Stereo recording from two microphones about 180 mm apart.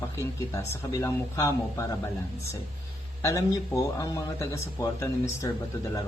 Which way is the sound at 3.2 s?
20° left (ahead or behind).